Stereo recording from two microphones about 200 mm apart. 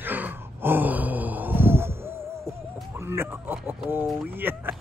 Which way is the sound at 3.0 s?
10° right (ahead or behind).